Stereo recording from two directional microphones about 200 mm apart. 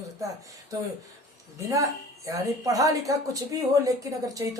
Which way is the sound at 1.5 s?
15° right (ahead or behind).